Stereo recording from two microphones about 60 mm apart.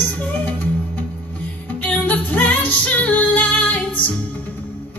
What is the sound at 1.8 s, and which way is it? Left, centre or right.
Music, left.